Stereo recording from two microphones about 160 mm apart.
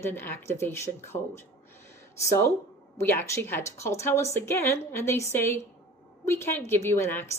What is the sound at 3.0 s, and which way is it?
Speech, 15° left (ahead or behind).